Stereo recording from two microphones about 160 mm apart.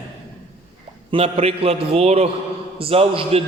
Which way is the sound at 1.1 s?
35° right (ahead or behind).